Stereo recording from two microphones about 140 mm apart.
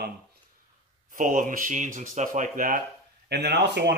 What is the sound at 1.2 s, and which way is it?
Speech, 70° right (ahead or behind).